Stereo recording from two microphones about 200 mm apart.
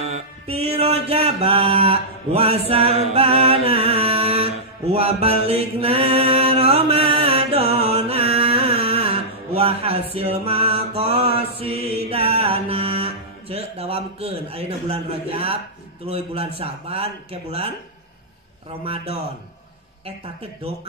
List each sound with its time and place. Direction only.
0.0 s mantra: 30° right (ahead or behind)
4.9 s music: 30° right (ahead or behind)
16.1 s speech: 30° right (ahead or behind)